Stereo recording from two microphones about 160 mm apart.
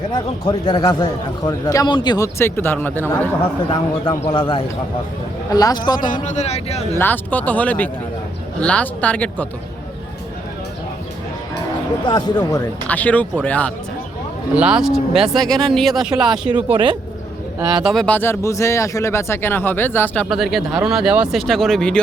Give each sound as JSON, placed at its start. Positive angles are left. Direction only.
{"t": 0.1, "sound": "a man's voice", "side_deg": 30}
{"t": 3.7, "sound": "a man's voice", "side_deg": 35}
{"t": 6.2, "sound": "speech", "side_deg": 45}
{"t": 6.9, "sound": "speech", "side_deg": 10}
{"t": 12.0, "sound": "a man's voice", "side_deg": 25}
{"t": 12.9, "sound": "speech", "side_deg": 10}
{"t": 14.5, "sound": "speech", "side_deg": -5}
{"t": 16.7, "sound": "speech", "side_deg": -30}
{"t": 17.8, "sound": "speech", "side_deg": 5}
{"t": 20.2, "sound": "speech", "side_deg": 0}